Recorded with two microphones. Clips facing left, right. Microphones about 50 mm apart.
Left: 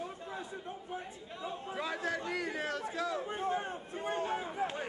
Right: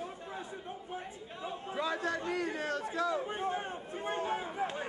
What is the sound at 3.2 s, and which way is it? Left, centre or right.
Speech, right.